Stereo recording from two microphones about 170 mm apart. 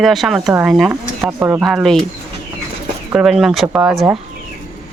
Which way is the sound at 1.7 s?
Centre (ahead or behind).